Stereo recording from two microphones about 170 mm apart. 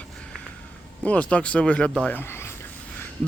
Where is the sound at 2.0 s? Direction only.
10° left (ahead or behind).